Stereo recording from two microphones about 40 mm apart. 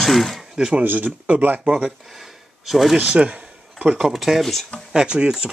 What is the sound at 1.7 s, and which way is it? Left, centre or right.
Speech, centre.